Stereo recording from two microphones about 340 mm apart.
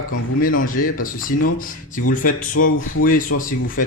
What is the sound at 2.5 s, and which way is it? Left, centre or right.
Speech, left.